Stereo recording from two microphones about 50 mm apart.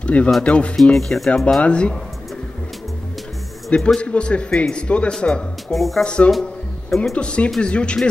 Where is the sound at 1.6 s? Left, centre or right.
Left.